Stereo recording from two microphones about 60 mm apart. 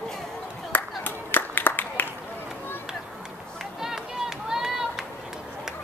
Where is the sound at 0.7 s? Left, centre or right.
Left.